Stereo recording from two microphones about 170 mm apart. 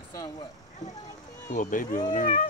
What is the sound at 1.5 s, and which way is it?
Speech, 50° left (ahead or behind).